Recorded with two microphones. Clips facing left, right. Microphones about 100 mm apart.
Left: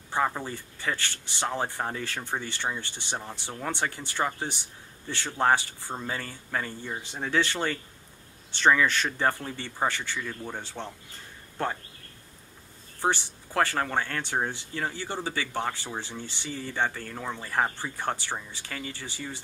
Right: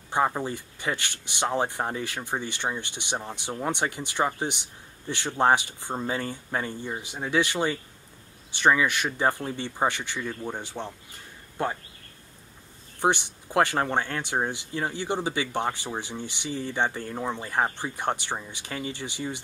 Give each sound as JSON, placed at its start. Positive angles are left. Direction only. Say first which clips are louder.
{"t": 0.1, "sound": "speech", "louder": "right 3 dB", "side_deg": -15}
{"t": 13.0, "sound": "speech", "louder": "right 3 dB", "side_deg": -20}